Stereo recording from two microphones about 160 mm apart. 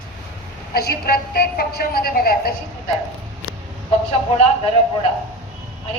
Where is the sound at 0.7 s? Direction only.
75° left (ahead or behind).